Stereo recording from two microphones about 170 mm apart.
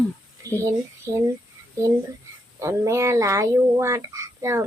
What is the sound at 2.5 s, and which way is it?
Speech, 15° right (ahead or behind).